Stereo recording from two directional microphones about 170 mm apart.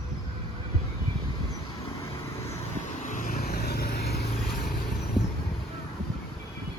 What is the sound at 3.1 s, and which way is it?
Vehicle, 50° left (ahead or behind).